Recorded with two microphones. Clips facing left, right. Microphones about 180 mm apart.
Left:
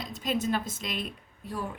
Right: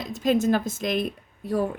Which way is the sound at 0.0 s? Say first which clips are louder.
Right 8 dB; 45° right (ahead or behind).